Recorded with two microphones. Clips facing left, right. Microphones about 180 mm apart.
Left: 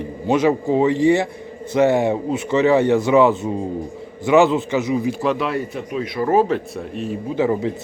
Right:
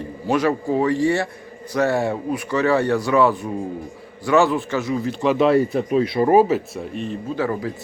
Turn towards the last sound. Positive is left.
turn(degrees=20)  # may be behind; listen again after turning